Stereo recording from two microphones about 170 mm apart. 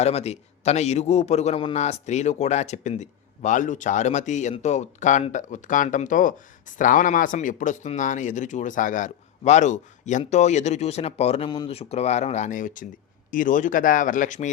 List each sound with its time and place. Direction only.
0.0 s a man's voice: 40° left (ahead or behind)